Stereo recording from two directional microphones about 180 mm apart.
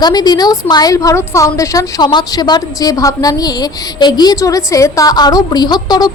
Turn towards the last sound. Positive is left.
turn(degrees=20)  # may be behind; listen again after turning